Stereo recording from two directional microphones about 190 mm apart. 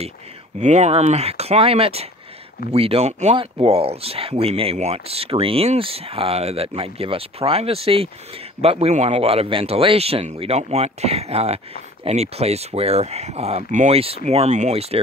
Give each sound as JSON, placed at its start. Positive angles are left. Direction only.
{"t": 0.6, "sound": "speech", "side_deg": -40}